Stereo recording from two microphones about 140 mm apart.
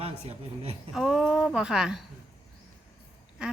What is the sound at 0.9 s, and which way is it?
Speech, centre (ahead or behind).